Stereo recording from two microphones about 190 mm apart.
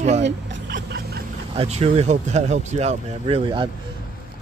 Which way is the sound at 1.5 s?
30° right (ahead or behind).